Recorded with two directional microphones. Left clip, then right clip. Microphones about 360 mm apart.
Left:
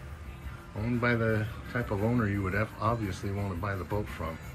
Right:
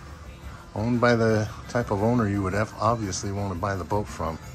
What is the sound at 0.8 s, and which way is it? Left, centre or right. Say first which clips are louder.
Speech: right 8 dB; centre.